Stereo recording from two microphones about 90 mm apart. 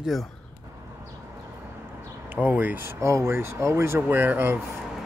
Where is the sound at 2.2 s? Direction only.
20° right (ahead or behind).